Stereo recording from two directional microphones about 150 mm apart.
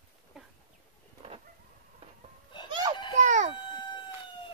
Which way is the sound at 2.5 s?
30° left (ahead or behind).